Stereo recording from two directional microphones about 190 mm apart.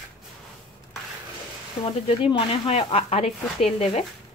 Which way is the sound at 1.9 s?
30° left (ahead or behind).